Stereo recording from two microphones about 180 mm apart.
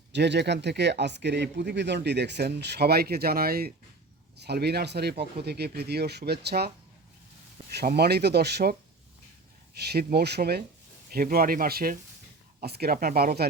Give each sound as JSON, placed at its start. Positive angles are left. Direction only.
{"t": 0.1, "sound": "speech", "side_deg": -70}
{"t": 7.7, "sound": "speech", "side_deg": -65}
{"t": 9.8, "sound": "speech", "side_deg": -60}